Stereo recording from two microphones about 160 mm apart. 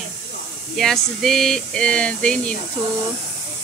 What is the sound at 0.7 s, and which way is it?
Speech, centre (ahead or behind).